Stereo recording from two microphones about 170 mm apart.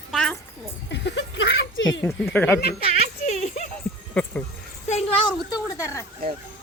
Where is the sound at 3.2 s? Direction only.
40° left (ahead or behind).